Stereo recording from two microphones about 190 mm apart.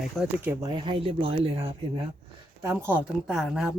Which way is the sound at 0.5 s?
20° right (ahead or behind).